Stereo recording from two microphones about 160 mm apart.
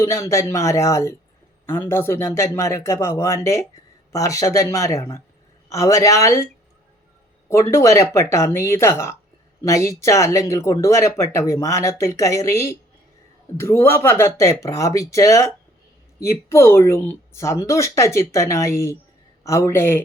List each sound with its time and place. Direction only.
0.0 s speech: 20° left (ahead or behind)
7.5 s speech: 20° left (ahead or behind)